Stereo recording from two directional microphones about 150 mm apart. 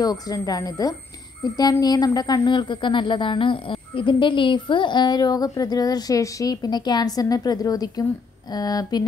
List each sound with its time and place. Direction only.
0.0 s a woman's voice: 25° left (ahead or behind)